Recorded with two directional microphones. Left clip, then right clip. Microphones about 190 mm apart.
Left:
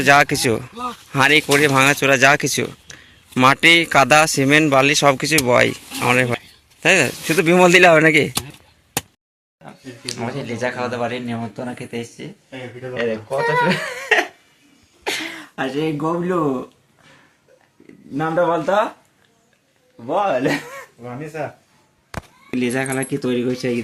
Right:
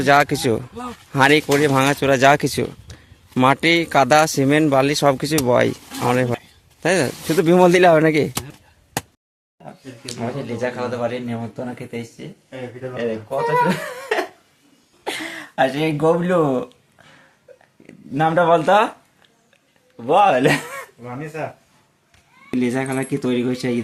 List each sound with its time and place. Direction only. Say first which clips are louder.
0.0 s a man's voice: left 2 dB; 10° right (ahead or behind)
9.6 s speech: left 3 dB; 5° left (ahead or behind)
12.5 s speech: right 1 dB; 30° left (ahead or behind)
15.0 s a sound: left 2 dB; 5° right (ahead or behind)
15.5 s speech: right 4 dB; 35° right (ahead or behind)
18.2 s speech: right 3 dB; 50° right (ahead or behind)
20.1 s speech: right 4 dB; 60° right (ahead or behind)
21.0 s speech: left 3 dB; 5° left (ahead or behind)
22.4 s speech: even; 5° right (ahead or behind)